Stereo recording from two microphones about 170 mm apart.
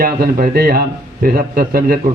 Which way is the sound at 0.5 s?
65° right (ahead or behind).